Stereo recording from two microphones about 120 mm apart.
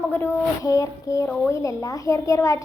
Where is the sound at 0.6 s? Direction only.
30° left (ahead or behind).